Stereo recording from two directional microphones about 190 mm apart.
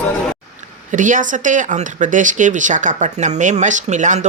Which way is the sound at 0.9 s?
40° right (ahead or behind).